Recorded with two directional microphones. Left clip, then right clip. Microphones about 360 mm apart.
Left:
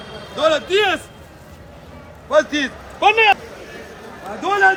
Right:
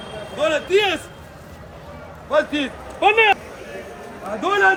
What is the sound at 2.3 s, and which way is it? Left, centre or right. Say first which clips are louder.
Speech: left 3 dB; centre.